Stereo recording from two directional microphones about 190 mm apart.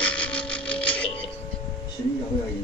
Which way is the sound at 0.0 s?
5° left (ahead or behind).